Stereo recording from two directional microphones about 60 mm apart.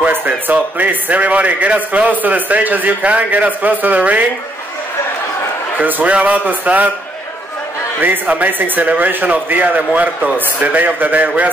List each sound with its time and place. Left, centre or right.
0.0 s a sound: right
0.5 s a man's voice: right
5.8 s a man's voice: right
8.0 s a man's voice: right